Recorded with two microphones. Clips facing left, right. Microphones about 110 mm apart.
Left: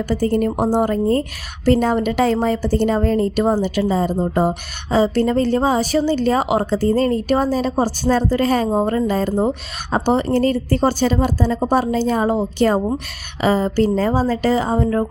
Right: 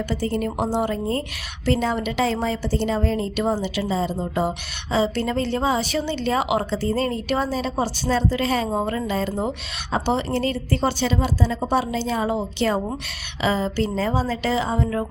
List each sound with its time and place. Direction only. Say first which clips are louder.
0.1 s speech: left 10 dB; 45° left (ahead or behind)